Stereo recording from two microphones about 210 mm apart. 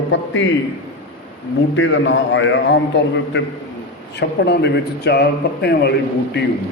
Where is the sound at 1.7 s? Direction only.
60° left (ahead or behind).